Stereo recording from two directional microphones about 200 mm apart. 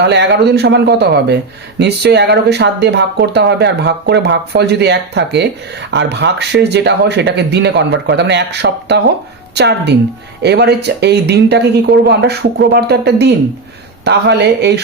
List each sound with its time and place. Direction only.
0.0 s speech: 60° right (ahead or behind)